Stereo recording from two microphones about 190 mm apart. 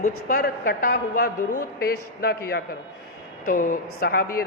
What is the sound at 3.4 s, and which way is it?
A woman's voice, 45° left (ahead or behind).